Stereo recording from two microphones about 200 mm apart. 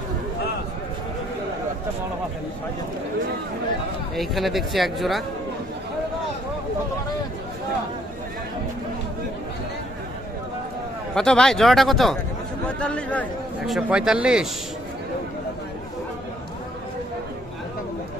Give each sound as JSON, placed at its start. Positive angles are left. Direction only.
{"t": 4.2, "sound": "speech", "side_deg": 0}
{"t": 11.1, "sound": "speech", "side_deg": 5}
{"t": 13.7, "sound": "speech", "side_deg": -5}